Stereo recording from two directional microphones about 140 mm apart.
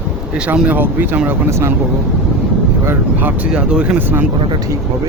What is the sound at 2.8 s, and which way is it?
Speech, 15° right (ahead or behind).